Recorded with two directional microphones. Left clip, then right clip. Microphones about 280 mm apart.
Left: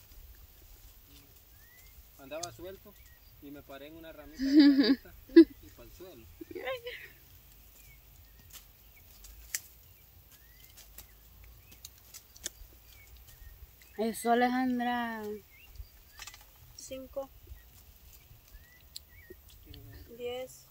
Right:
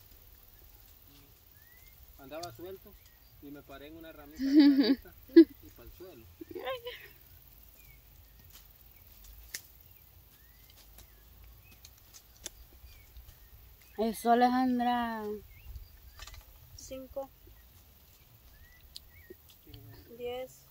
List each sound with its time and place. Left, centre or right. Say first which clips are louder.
2.1 s speech: left 2 dB; left
4.4 s whimper: left 1 dB; centre
5.8 s speech: even; left
6.5 s whimper: even; centre
13.9 s speech: right 2 dB; centre
16.7 s speech: left 1 dB; centre
18.9 s a sound: left 1 dB; centre
20.2 s speech: even; centre